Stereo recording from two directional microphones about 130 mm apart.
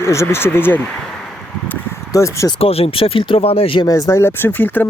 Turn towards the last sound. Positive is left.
turn(degrees=15)  # may be behind; listen again after turning